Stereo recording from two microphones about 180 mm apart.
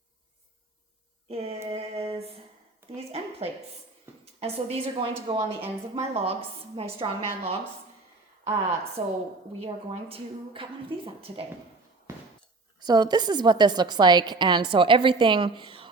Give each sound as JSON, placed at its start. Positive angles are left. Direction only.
{"t": 1.3, "sound": "a woman's voice", "side_deg": -35}
{"t": 1.7, "sound": "a sound", "side_deg": -35}
{"t": 3.0, "sound": "a woman's voice", "side_deg": -35}
{"t": 9.0, "sound": "a woman's voice", "side_deg": -35}
{"t": 12.8, "sound": "a woman's voice", "side_deg": -20}